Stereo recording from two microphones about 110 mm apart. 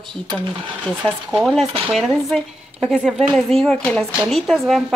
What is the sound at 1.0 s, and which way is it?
A woman's voice, 10° right (ahead or behind).